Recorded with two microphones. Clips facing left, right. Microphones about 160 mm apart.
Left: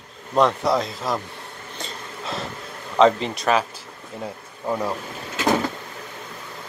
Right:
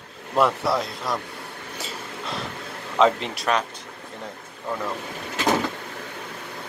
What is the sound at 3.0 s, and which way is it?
Speech, centre (ahead or behind).